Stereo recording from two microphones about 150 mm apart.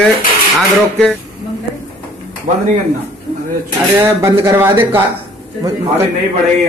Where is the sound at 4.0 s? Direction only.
15° right (ahead or behind).